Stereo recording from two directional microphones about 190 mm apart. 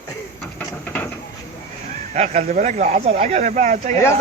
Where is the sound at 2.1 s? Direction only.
40° right (ahead or behind).